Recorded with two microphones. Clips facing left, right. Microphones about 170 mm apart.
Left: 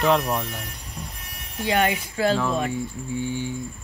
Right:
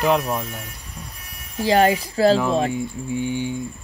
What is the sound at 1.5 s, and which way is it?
Speech, 35° right (ahead or behind).